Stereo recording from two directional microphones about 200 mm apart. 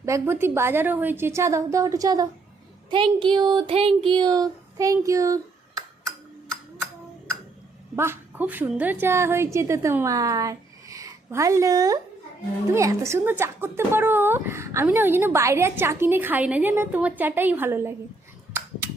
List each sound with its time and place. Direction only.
0.0 s speech: 15° right (ahead or behind)
7.9 s a woman's voice: 10° right (ahead or behind)